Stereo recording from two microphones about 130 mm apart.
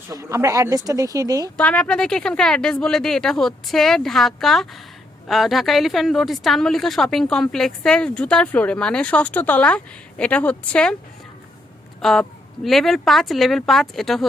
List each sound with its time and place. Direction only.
0.1 s speech: 20° right (ahead or behind)
1.5 s a woman's voice: 10° left (ahead or behind)
11.9 s a woman's voice: 5° left (ahead or behind)